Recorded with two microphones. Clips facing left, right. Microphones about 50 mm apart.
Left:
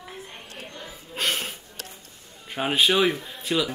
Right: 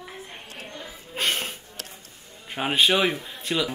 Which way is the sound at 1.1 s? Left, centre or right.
Centre.